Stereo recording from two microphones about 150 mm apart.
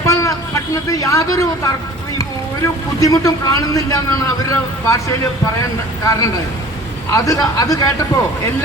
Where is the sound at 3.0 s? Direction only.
25° left (ahead or behind).